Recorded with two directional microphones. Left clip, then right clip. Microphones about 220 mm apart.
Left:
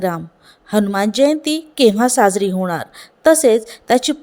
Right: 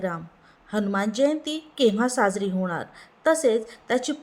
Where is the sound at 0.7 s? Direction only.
40° left (ahead or behind).